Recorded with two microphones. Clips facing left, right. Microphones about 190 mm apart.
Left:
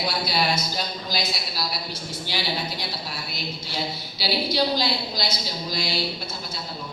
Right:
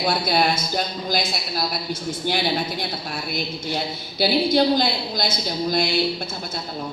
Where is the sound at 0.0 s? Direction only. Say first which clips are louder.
Right 5 dB; 50° right (ahead or behind).